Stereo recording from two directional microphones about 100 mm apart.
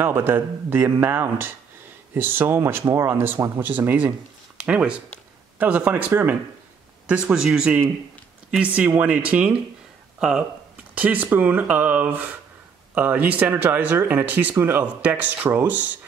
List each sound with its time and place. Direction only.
0.0 s speech: 20° right (ahead or behind)